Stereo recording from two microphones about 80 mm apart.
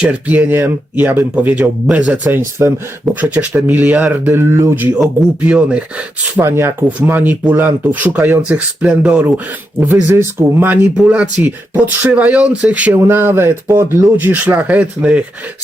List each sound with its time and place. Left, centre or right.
0.0 s speech: centre
2.6 s speech: right
3.2 s speech: centre
4.4 s speech: right
5.5 s speech: centre
6.3 s speech: right
13.0 s speech: right